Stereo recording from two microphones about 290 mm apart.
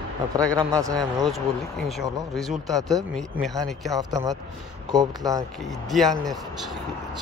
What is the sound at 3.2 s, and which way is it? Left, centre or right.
Speech, centre.